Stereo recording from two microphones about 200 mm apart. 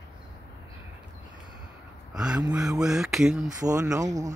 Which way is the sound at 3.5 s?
15° right (ahead or behind).